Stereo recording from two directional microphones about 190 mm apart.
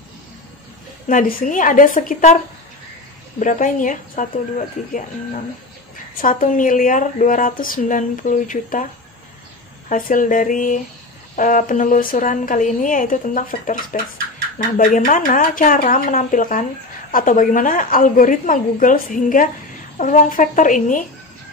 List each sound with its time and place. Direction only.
1.0 s speech: 45° left (ahead or behind)
9.8 s speech: 45° left (ahead or behind)
14.8 s speech: 45° left (ahead or behind)